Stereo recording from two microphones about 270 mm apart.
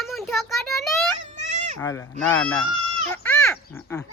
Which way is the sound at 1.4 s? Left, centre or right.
Right.